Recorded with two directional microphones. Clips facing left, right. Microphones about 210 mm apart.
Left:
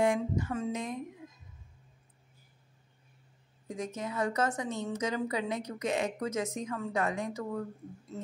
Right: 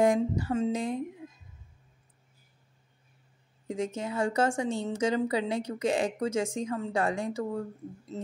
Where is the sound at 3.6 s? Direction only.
25° right (ahead or behind).